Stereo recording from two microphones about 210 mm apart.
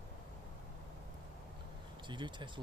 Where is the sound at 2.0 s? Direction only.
20° right (ahead or behind).